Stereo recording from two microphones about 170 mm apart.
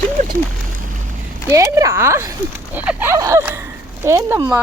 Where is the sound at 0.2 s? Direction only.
50° right (ahead or behind).